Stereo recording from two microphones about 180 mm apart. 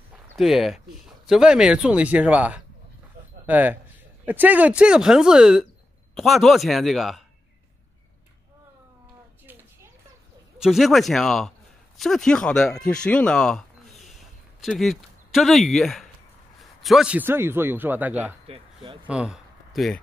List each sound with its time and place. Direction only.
0.1 s a man's voice: centre (ahead or behind)
10.6 s a man's voice: centre (ahead or behind)
18.5 s speech: 30° right (ahead or behind)
19.0 s speech: 5° right (ahead or behind)